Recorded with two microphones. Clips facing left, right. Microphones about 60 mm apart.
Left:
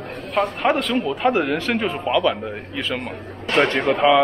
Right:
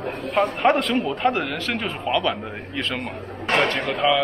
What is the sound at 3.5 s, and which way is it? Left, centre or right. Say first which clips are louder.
Speech: left 4 dB; left.